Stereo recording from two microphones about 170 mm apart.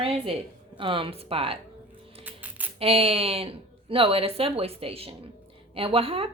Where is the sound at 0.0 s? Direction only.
35° right (ahead or behind).